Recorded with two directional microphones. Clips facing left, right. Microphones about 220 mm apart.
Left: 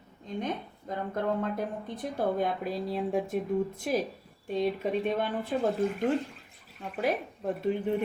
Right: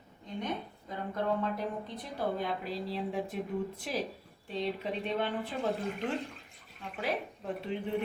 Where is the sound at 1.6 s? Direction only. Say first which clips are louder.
Left 3 dB; 50° left (ahead or behind).